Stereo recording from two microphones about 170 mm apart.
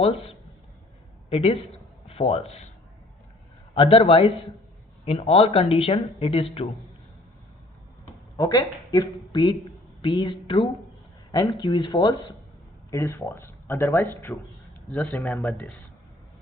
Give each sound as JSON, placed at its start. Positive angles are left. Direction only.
{"t": 1.3, "sound": "speech", "side_deg": 35}
{"t": 3.8, "sound": "speech", "side_deg": 30}
{"t": 8.4, "sound": "speech", "side_deg": 25}
{"t": 12.9, "sound": "speech", "side_deg": 15}